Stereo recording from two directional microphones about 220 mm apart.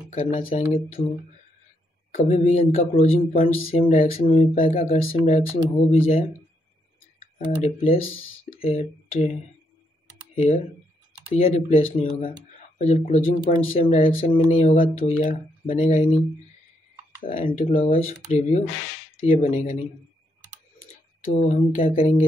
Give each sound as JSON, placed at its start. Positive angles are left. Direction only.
{"t": 0.1, "sound": "speech", "side_deg": 25}
{"t": 1.0, "sound": "speech", "side_deg": 40}
{"t": 2.1, "sound": "speech", "side_deg": 30}
{"t": 10.3, "sound": "speech", "side_deg": 35}
{"t": 17.3, "sound": "speech", "side_deg": 30}
{"t": 21.4, "sound": "speech", "side_deg": 30}